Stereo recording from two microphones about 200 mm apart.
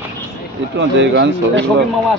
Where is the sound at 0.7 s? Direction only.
60° right (ahead or behind).